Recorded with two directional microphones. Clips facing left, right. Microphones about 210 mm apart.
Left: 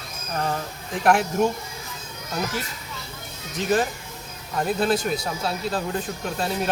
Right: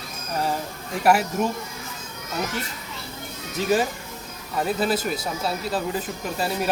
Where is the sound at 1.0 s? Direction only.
5° right (ahead or behind).